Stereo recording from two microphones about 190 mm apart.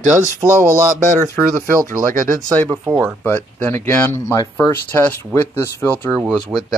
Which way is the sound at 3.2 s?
10° left (ahead or behind).